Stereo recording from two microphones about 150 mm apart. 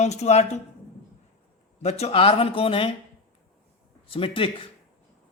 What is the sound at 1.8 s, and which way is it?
Speech, 45° left (ahead or behind).